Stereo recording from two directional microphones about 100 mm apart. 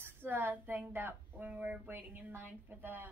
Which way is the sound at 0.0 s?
20° right (ahead or behind).